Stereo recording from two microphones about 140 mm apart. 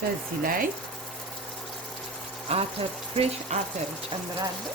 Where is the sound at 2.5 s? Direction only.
45° right (ahead or behind).